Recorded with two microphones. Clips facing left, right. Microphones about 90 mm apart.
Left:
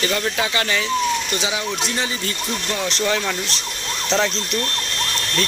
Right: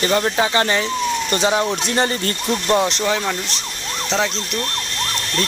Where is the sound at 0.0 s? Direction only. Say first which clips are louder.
Right 4 dB; 30° right (ahead or behind).